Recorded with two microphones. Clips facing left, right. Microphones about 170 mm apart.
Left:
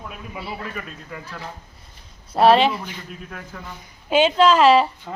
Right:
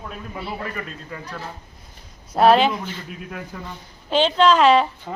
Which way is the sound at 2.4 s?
Centre (ahead or behind).